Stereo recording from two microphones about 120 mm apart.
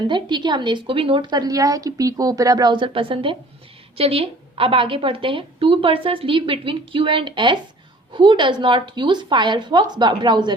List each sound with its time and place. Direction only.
0.1 s a woman's voice: 40° right (ahead or behind)